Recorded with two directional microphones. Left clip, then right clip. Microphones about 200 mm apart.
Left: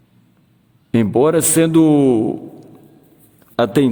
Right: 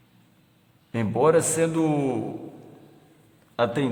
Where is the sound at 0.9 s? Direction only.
45° left (ahead or behind).